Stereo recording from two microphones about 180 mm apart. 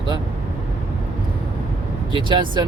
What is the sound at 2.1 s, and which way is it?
Speech, 25° right (ahead or behind).